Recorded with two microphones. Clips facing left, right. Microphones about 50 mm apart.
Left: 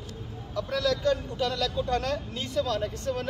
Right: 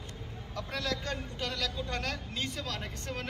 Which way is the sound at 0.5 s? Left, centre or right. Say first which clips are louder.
Left 8 dB; right.